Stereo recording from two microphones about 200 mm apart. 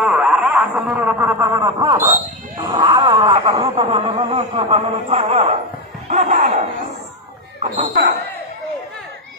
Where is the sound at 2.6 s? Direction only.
20° right (ahead or behind).